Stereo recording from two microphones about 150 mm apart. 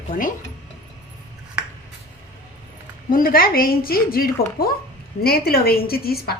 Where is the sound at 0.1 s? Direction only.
60° left (ahead or behind).